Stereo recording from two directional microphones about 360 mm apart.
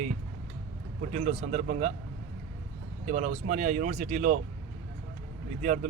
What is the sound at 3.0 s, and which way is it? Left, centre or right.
Speech, centre.